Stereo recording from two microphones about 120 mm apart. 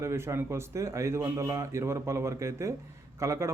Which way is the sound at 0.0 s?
20° right (ahead or behind).